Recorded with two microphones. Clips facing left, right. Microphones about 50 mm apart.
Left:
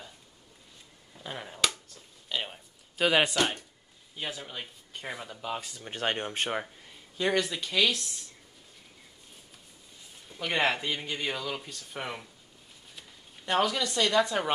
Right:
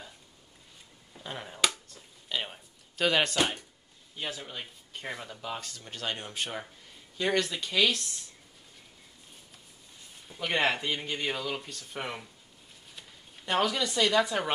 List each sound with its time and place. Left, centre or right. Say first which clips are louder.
1.1 s finger snapping: even; centre
3.1 s speech: left 1 dB; centre
5.9 s speech: left 6 dB; left
7.2 s speech: left 1 dB; centre
10.2 s speech: even; centre
13.5 s speech: left 1 dB; centre